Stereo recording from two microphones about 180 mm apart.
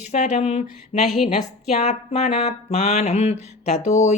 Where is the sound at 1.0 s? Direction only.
Centre (ahead or behind).